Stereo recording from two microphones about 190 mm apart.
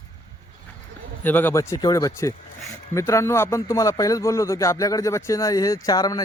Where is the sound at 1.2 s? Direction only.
10° left (ahead or behind).